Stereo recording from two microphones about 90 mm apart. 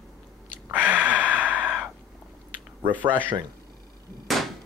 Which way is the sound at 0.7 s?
20° right (ahead or behind).